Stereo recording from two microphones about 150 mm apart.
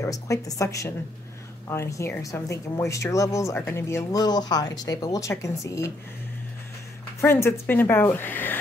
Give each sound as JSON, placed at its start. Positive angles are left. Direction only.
{"t": 0.0, "sound": "speech", "side_deg": 20}
{"t": 7.2, "sound": "speech", "side_deg": 15}